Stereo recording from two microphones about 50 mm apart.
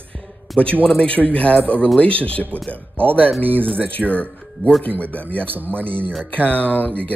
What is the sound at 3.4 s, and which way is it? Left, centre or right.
Speech, right.